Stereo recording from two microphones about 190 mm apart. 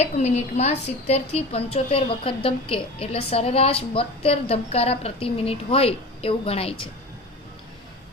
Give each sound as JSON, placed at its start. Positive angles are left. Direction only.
{"t": 0.0, "sound": "a woman's voice", "side_deg": 35}